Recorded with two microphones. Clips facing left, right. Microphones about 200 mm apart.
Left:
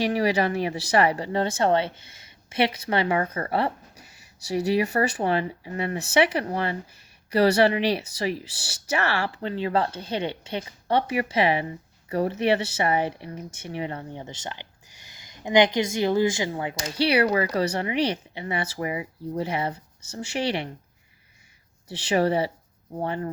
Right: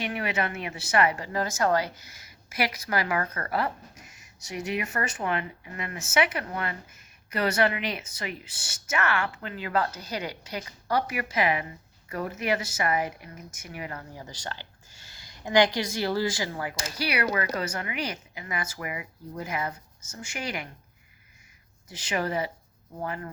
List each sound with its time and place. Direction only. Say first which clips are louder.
0.0 s speech: left 7 dB; 35° left (ahead or behind)
21.8 s speech: left 7 dB; 30° left (ahead or behind)